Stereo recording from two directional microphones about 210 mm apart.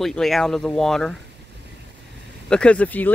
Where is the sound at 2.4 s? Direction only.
5° left (ahead or behind).